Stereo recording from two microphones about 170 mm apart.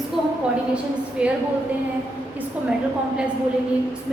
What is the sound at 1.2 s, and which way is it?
Speech, 5° right (ahead or behind).